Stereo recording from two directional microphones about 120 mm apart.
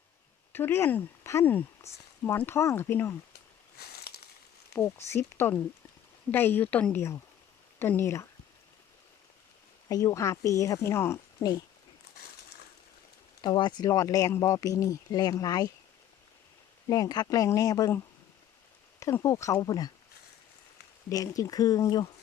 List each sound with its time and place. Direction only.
0.5 s speech: 20° left (ahead or behind)
4.7 s speech: 25° left (ahead or behind)
9.9 s speech: 30° left (ahead or behind)
13.4 s speech: 40° left (ahead or behind)
16.9 s speech: 30° left (ahead or behind)
18.9 s speech: 25° left (ahead or behind)
21.1 s speech: 30° left (ahead or behind)